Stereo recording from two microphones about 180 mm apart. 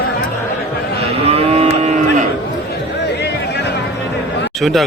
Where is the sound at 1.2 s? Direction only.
35° right (ahead or behind).